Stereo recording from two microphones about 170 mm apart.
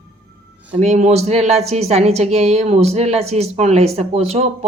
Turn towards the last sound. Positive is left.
turn(degrees=-40)  # may be behind; listen again after turning